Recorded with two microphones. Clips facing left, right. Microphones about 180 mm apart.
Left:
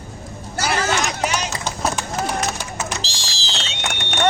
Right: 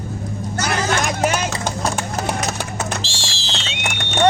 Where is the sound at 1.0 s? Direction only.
50° right (ahead or behind).